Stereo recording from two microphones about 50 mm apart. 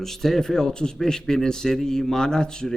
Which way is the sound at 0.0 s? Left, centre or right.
Centre.